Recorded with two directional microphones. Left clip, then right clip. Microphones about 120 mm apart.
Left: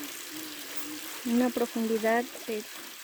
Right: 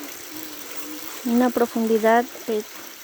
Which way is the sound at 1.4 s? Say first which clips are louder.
Right 9 dB; 5° left (ahead or behind).